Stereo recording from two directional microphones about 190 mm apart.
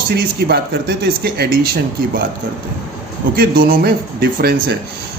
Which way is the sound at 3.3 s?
50° right (ahead or behind).